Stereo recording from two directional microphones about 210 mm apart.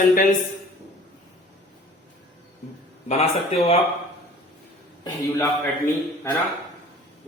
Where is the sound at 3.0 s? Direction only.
30° left (ahead or behind).